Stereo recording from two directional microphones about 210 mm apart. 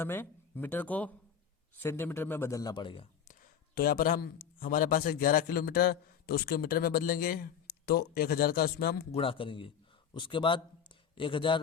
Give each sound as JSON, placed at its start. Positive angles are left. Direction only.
{"t": 0.0, "sound": "a man's voice", "side_deg": 10}
{"t": 3.2, "sound": "a man's voice", "side_deg": 40}
{"t": 9.1, "sound": "speech", "side_deg": 25}